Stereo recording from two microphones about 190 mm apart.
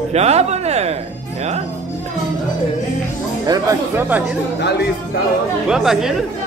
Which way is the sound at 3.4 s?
20° right (ahead or behind).